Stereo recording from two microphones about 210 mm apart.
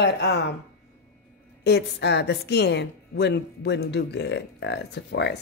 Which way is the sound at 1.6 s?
55° left (ahead or behind).